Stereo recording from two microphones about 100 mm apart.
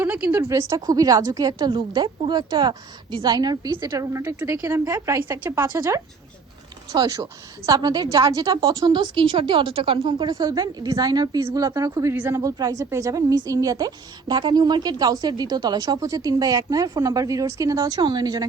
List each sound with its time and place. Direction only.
0.0 s speech: 15° right (ahead or behind)
0.3 s a woman's voice: 30° right (ahead or behind); by 3.9 s 45° right (ahead or behind)
3.9 s a woman's voice: 30° right (ahead or behind)
6.9 s a woman's voice: 45° right (ahead or behind)
10.4 s a woman's voice: 40° right (ahead or behind)
11.3 s speech: 30° right (ahead or behind)
12.1 s speech: 20° right (ahead or behind)
12.4 s a woman's voice: 35° right (ahead or behind)